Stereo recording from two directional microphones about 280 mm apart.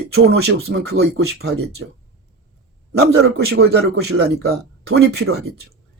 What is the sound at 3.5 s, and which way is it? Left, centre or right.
Speech, right.